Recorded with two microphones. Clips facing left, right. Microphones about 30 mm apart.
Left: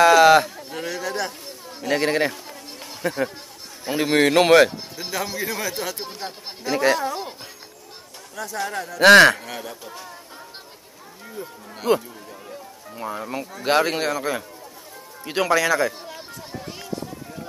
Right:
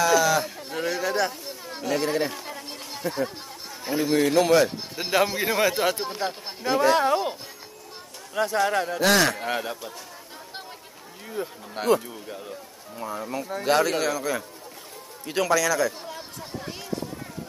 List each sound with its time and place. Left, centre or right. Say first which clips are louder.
0.0 s a sound: left 8 dB; left
0.7 s a sound: right 2 dB; centre
1.9 s speech: left 4 dB; left
3.0 s speech: left 3 dB; left
4.0 s speech: left 4 dB; left
4.9 s speech: right 5 dB; right
6.7 s speech: even; left
8.6 s speech: right 5 dB; right
9.0 s speech: left 11 dB; left
9.4 s speech: right 5 dB; right
11.4 s speech: right 4 dB; right
11.9 s a man's voice: left 2 dB; left